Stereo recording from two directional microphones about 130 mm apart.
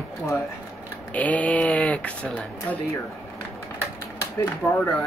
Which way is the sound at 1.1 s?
10° left (ahead or behind).